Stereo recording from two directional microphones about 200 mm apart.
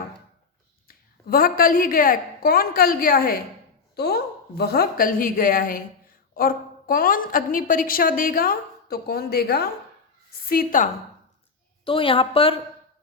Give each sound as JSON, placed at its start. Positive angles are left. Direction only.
{"t": 0.9, "sound": "a woman's voice", "side_deg": 45}
{"t": 11.9, "sound": "a woman's voice", "side_deg": 25}